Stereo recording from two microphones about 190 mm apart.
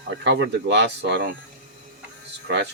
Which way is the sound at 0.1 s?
65° right (ahead or behind).